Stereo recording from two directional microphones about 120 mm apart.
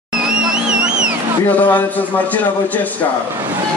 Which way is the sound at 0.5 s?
5° right (ahead or behind).